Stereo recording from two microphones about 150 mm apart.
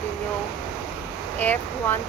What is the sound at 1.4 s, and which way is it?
Speech, 10° left (ahead or behind).